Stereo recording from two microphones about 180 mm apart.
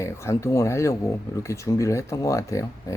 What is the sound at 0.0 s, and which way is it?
Speech, 15° left (ahead or behind).